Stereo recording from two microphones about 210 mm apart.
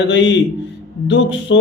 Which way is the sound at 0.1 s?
60° left (ahead or behind).